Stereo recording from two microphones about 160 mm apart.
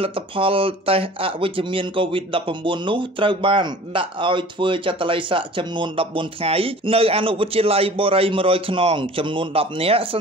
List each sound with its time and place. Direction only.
0.0 s speech: 35° right (ahead or behind)